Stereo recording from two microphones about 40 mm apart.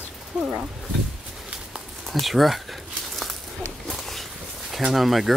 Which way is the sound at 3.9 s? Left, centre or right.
Centre.